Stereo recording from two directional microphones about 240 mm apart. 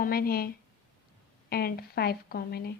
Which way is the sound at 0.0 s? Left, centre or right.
Left.